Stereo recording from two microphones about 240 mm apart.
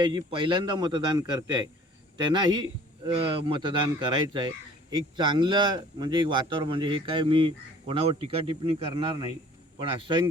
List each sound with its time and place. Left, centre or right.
0.0 s a man's voice: centre